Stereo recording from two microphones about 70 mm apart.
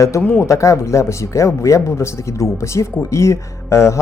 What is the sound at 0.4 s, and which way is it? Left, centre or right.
Speech, left.